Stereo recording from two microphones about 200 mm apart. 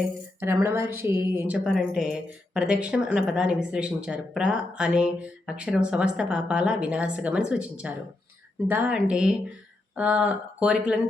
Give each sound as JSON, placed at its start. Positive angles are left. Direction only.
{"t": 0.3, "sound": "a woman's voice", "side_deg": -10}